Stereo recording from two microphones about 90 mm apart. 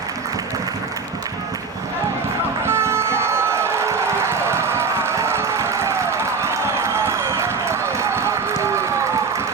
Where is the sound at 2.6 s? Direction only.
30° right (ahead or behind).